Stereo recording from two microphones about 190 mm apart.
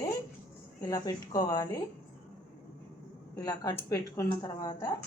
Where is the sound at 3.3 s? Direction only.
20° left (ahead or behind).